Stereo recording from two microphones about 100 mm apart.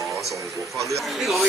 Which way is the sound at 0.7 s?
30° right (ahead or behind).